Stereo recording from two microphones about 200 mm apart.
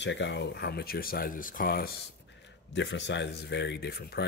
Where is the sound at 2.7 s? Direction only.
65° left (ahead or behind).